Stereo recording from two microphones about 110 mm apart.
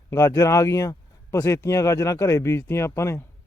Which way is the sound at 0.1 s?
25° left (ahead or behind).